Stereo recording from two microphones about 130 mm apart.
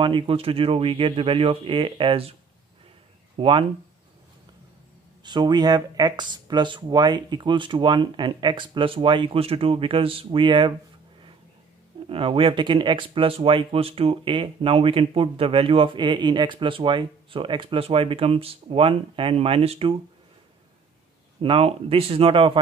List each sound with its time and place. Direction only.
0.0 s speech: 45° right (ahead or behind)
3.3 s speech: 40° right (ahead or behind)
5.2 s speech: 35° right (ahead or behind)
12.1 s speech: 45° right (ahead or behind)
21.4 s speech: 45° right (ahead or behind)